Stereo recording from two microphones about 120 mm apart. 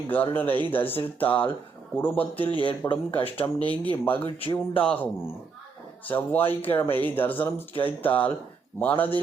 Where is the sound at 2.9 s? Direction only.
50° left (ahead or behind).